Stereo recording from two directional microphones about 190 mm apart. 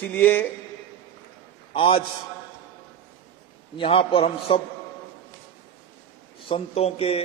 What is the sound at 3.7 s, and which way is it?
Speech, 30° left (ahead or behind).